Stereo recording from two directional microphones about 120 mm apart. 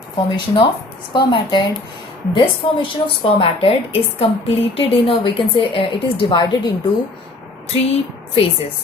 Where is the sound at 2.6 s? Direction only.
45° left (ahead or behind).